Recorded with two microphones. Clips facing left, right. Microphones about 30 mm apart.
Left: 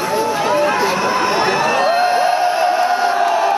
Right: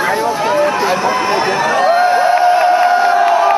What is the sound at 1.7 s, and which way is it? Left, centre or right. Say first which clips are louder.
Crowd: right 6 dB; centre.